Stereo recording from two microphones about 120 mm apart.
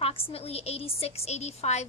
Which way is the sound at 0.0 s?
55° left (ahead or behind).